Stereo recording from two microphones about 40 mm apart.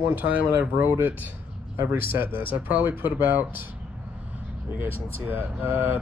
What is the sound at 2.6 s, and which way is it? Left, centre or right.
Speech, right.